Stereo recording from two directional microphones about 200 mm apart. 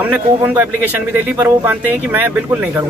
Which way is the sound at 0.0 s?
10° right (ahead or behind).